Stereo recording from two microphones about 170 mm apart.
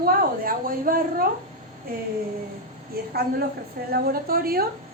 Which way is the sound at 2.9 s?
65° right (ahead or behind).